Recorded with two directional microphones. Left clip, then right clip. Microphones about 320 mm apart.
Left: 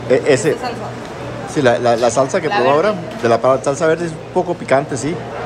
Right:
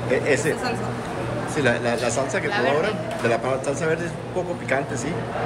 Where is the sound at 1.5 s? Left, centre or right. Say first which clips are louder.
Left 9 dB; centre.